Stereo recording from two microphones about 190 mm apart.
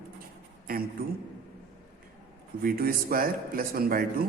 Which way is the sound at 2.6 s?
50° right (ahead or behind).